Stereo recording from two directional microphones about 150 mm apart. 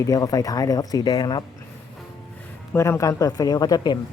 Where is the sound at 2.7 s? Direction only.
20° left (ahead or behind).